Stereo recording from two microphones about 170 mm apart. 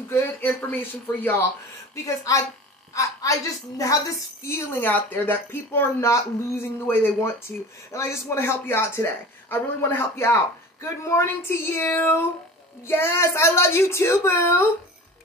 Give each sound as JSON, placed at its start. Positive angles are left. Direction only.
{"t": 0.1, "sound": "speech", "side_deg": 10}
{"t": 2.0, "sound": "a woman's voice", "side_deg": 20}